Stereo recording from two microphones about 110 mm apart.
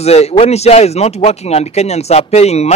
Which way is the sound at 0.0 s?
75° left (ahead or behind).